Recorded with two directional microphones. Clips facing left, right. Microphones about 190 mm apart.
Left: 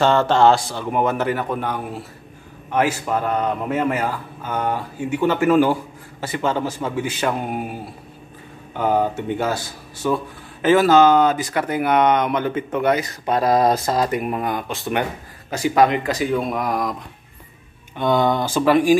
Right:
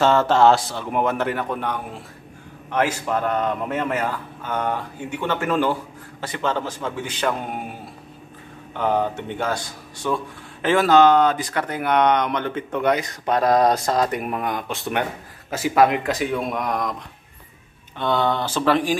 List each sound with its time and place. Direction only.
0.0 s a man's voice: centre (ahead or behind)
8.7 s speech: 10° left (ahead or behind)
17.9 s a man's voice: 10° left (ahead or behind)